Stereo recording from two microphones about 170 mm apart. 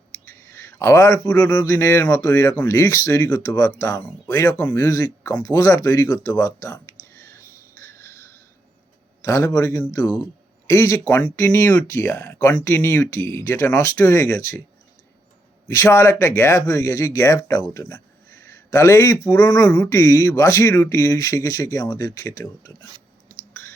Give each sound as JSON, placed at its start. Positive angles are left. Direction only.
{"t": 0.5, "sound": "speech", "side_deg": 15}
{"t": 15.6, "sound": "speech", "side_deg": 15}